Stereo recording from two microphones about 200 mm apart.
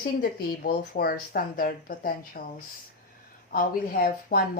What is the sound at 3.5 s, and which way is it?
Speech, 45° left (ahead or behind).